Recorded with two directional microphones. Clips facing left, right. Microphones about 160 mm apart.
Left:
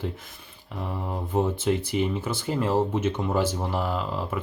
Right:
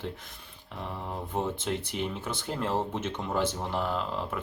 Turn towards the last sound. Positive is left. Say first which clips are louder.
# left 3 dB
turn(degrees=5)  # may be behind; listen again after turning